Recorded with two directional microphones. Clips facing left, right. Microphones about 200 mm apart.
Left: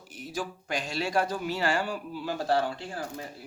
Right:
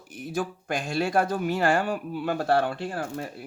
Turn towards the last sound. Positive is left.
turn(degrees=-55)  # may be behind; listen again after turning